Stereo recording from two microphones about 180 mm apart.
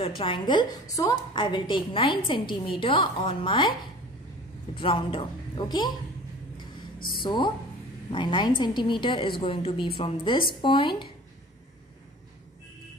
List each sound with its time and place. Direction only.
0.2 s a woman's voice: 25° left (ahead or behind)
4.7 s a woman's voice: 30° left (ahead or behind)
7.2 s a woman's voice: 25° left (ahead or behind)